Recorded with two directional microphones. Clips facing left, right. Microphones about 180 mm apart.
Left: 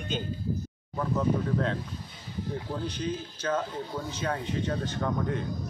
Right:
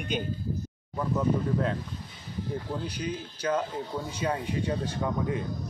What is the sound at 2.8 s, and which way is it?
Speech, 10° right (ahead or behind).